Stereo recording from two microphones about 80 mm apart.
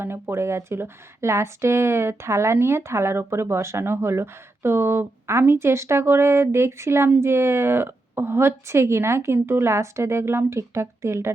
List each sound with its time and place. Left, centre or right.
0.0 s speech: right